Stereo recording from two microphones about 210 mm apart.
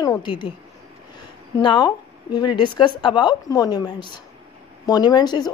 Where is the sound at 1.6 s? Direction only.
20° left (ahead or behind).